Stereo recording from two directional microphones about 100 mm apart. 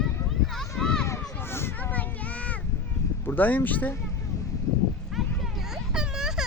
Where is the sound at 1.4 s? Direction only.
25° left (ahead or behind).